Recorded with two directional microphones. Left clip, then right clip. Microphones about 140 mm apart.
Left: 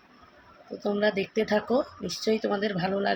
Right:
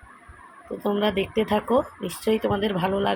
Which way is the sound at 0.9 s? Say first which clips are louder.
Right 2 dB; 15° right (ahead or behind).